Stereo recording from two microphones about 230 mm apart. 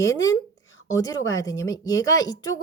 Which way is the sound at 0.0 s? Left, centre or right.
Centre.